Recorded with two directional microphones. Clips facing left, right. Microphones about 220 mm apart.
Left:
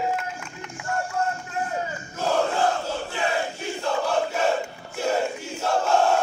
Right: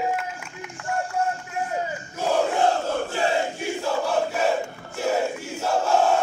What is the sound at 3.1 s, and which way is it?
Crowd, 30° right (ahead or behind).